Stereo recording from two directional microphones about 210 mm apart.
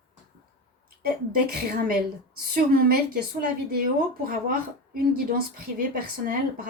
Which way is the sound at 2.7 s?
45° right (ahead or behind).